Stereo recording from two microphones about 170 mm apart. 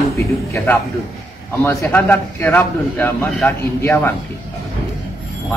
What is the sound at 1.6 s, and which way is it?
A man's voice, 15° left (ahead or behind).